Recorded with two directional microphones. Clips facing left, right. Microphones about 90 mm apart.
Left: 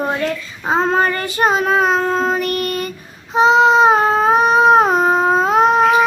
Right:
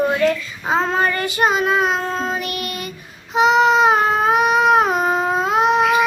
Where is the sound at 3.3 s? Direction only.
30° left (ahead or behind).